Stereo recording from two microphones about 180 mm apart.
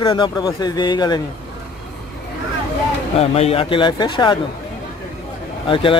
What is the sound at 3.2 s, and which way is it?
Speech, 35° left (ahead or behind).